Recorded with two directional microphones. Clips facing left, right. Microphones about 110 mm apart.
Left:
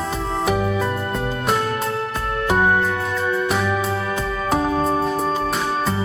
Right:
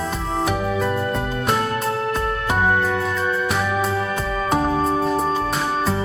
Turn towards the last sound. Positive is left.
turn(degrees=0)  # may be behind; listen again after turning